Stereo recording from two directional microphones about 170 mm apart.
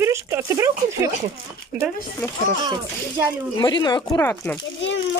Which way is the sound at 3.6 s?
25° left (ahead or behind).